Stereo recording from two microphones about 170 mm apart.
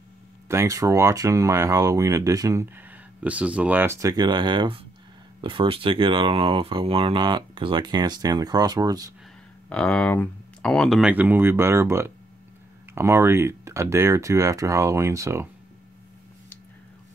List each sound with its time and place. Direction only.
0.5 s speech: 15° right (ahead or behind)
9.7 s speech: 5° left (ahead or behind); by 15.4 s 15° right (ahead or behind)